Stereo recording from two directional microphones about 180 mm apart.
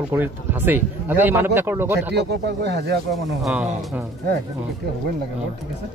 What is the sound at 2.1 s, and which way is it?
Speech, 70° right (ahead or behind).